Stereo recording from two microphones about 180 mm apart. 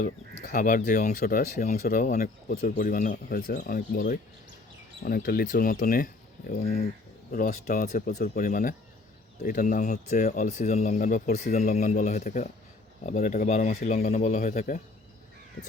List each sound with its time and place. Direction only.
0.0 s speech: 45° left (ahead or behind)
3.2 s speech: 60° left (ahead or behind)
6.6 s speech: 35° left (ahead or behind)
7.3 s speech: 50° left (ahead or behind)